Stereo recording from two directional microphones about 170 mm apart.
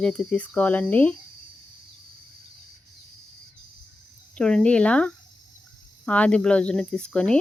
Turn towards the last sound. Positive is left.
turn(degrees=5)  # may be behind; listen again after turning